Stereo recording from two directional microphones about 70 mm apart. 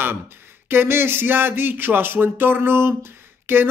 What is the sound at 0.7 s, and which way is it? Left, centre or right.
Speech, right.